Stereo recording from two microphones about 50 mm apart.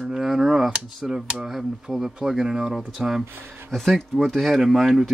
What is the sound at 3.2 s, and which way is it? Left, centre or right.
Speech, right.